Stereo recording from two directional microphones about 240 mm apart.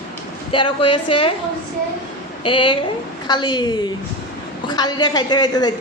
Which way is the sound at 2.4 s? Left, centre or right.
Left.